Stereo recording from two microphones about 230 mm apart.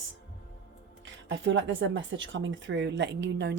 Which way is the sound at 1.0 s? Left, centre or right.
Right.